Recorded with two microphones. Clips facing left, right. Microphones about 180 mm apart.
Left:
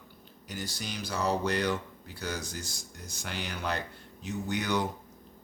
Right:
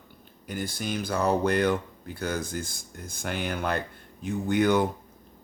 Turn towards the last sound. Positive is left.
turn(degrees=-55)  # may be behind; listen again after turning